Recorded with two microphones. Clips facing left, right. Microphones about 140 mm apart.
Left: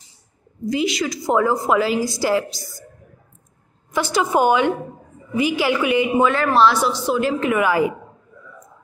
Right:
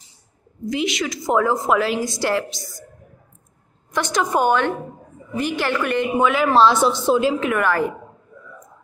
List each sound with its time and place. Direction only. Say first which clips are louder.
0.7 s a woman's voice: left 2 dB; centre (ahead or behind)
3.9 s a woman's voice: left 2 dB; 5° left (ahead or behind)
6.4 s a woman's voice: right 1 dB; 15° right (ahead or behind)
7.3 s a woman's voice: left 2 dB; centre (ahead or behind)